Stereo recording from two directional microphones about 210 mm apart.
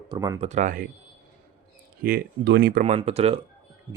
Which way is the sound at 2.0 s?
45° right (ahead or behind).